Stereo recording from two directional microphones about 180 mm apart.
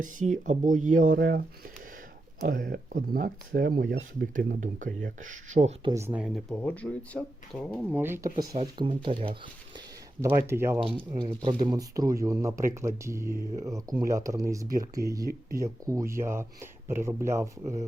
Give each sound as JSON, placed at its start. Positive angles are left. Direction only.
{"t": 0.0, "sound": "speech", "side_deg": -45}
{"t": 5.8, "sound": "speech", "side_deg": -15}
{"t": 6.2, "sound": "speech", "side_deg": 0}
{"t": 7.9, "sound": "speech", "side_deg": -10}
{"t": 8.6, "sound": "speech", "side_deg": -25}
{"t": 10.2, "sound": "speech", "side_deg": -15}
{"t": 11.1, "sound": "speech", "side_deg": -25}